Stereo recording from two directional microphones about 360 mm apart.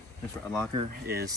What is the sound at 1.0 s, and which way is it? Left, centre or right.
Speech, right.